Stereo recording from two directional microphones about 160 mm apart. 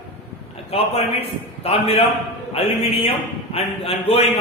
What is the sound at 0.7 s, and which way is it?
Mantra, 40° left (ahead or behind).